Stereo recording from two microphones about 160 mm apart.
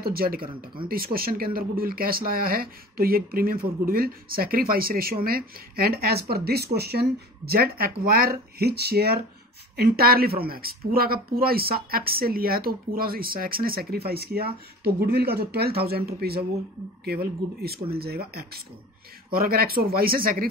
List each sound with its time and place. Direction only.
0.0 s speech: 70° right (ahead or behind)
9.8 s speech: 70° right (ahead or behind)